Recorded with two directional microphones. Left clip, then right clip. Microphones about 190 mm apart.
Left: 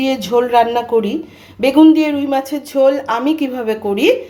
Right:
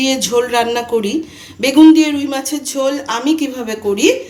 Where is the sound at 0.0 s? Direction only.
30° left (ahead or behind).